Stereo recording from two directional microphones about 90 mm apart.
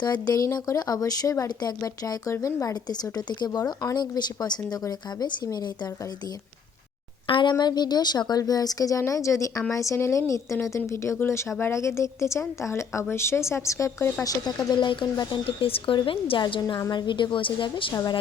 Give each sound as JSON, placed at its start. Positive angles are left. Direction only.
{"t": 0.0, "sound": "speech", "side_deg": 50}
{"t": 7.3, "sound": "a woman's voice", "side_deg": 65}
{"t": 7.6, "sound": "a woman's voice", "side_deg": 50}
{"t": 14.3, "sound": "speech", "side_deg": 50}
{"t": 15.4, "sound": "speech", "side_deg": 90}
{"t": 16.0, "sound": "a woman's voice", "side_deg": 75}
{"t": 16.4, "sound": "a woman's voice", "side_deg": 55}
{"t": 17.9, "sound": "speech", "side_deg": 50}